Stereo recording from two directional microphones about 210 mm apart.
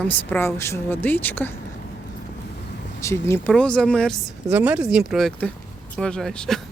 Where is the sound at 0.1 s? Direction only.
10° left (ahead or behind).